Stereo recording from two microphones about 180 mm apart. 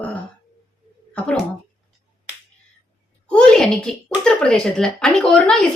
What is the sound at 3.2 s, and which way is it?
Speech, 5° left (ahead or behind).